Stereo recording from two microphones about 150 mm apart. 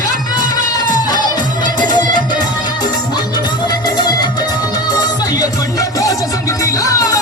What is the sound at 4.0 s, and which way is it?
Music, 30° left (ahead or behind).